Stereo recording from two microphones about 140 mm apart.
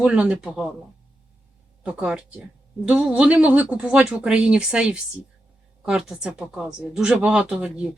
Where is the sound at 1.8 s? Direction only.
10° right (ahead or behind).